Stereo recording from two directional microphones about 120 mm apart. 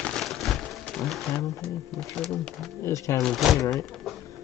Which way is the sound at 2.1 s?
5° left (ahead or behind).